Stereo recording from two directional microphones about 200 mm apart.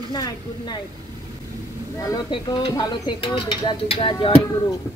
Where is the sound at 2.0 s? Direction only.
20° left (ahead or behind).